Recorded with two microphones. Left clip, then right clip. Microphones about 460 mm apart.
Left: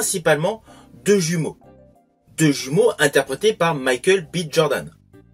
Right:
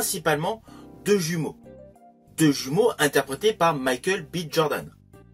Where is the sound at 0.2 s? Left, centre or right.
Right.